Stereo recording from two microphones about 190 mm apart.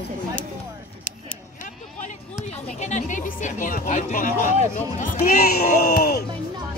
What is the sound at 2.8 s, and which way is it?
Speech, 40° left (ahead or behind).